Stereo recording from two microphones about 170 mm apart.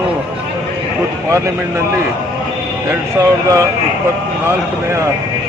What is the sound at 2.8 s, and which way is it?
Speech, 20° right (ahead or behind).